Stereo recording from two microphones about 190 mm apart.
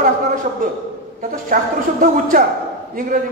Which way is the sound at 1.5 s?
45° right (ahead or behind).